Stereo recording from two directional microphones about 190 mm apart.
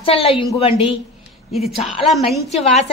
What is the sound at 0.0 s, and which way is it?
Speech, 30° left (ahead or behind).